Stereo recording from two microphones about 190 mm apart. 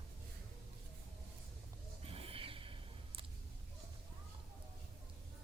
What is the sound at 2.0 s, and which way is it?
Snort, 30° right (ahead or behind).